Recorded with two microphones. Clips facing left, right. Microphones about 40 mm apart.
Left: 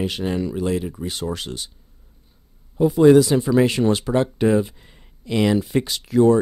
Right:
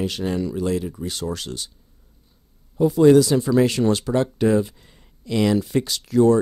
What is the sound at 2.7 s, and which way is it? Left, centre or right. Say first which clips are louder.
Speech: left 1 dB; centre.